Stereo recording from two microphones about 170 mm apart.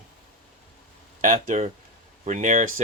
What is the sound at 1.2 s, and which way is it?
Speech, 50° right (ahead or behind).